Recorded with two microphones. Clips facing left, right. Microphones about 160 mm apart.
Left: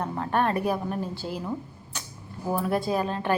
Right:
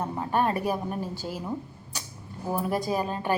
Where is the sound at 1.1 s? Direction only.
45° right (ahead or behind).